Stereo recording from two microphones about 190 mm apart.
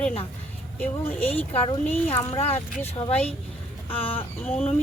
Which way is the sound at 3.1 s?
5° left (ahead or behind).